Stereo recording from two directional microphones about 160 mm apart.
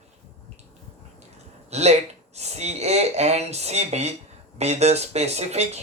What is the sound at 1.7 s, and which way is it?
Speech, 45° right (ahead or behind).